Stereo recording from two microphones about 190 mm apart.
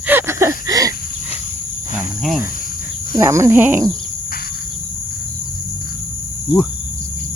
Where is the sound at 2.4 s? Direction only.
45° left (ahead or behind).